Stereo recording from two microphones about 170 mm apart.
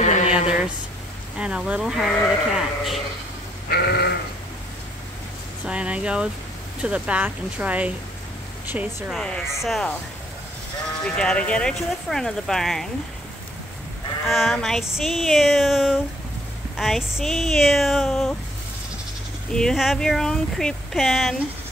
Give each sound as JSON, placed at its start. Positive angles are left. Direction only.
{"t": 0.0, "sound": "a sound", "side_deg": 40}
{"t": 1.4, "sound": "speech", "side_deg": -5}
{"t": 3.6, "sound": "sheep", "side_deg": 70}
{"t": 5.7, "sound": "speech", "side_deg": -5}
{"t": 9.2, "sound": "speech", "side_deg": 5}
{"t": 11.1, "sound": "speech", "side_deg": 5}
{"t": 14.2, "sound": "speech", "side_deg": 0}
{"t": 19.5, "sound": "speech", "side_deg": 0}